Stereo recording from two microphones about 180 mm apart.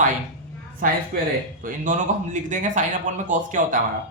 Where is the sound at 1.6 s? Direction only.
45° right (ahead or behind).